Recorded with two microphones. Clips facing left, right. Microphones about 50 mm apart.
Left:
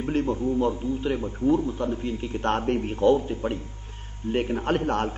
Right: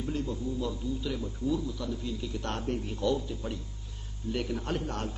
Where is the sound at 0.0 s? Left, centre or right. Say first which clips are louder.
Left 8 dB; left.